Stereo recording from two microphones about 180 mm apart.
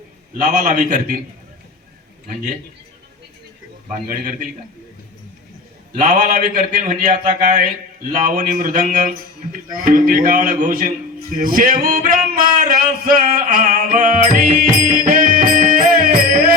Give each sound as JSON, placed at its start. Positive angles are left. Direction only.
{"t": 0.3, "sound": "a man's voice", "side_deg": -45}
{"t": 6.0, "sound": "a man's voice", "side_deg": -45}